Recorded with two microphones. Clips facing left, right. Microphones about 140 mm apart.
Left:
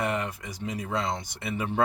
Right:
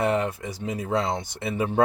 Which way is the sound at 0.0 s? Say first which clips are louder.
Right 6 dB; 30° right (ahead or behind).